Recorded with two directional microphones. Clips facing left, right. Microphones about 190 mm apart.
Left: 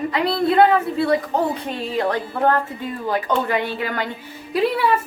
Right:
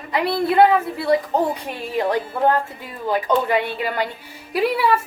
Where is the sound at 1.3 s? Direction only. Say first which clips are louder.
Even; 15° right (ahead or behind).